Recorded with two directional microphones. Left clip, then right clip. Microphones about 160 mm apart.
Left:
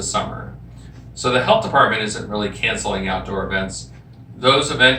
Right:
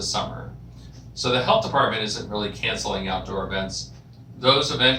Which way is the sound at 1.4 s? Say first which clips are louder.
Left 5 dB; centre (ahead or behind).